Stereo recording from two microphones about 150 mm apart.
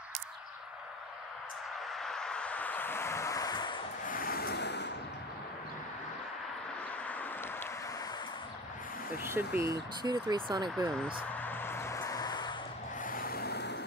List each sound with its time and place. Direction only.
2.0 s a sound: 5° left (ahead or behind); by 3.8 s 30° left (ahead or behind)
4.0 s vehicle: 70° left (ahead or behind); by 4.6 s 85° left
7.1 s vehicle: 10° left (ahead or behind)
9.2 s speech: 15° right (ahead or behind); by 11.2 s 30° right (ahead or behind)
11.3 s a sound: 15° left (ahead or behind); by 12.5 s 30° left (ahead or behind)
13.0 s vehicle: 70° left (ahead or behind); by 13.7 s 90° left